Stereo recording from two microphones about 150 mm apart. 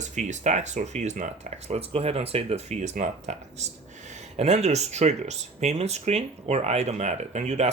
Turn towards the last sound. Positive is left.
turn(degrees=-50)  # may be behind; listen again after turning